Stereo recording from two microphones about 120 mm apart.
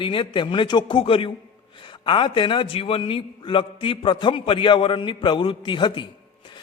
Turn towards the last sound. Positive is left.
turn(degrees=40)  # may be behind; listen again after turning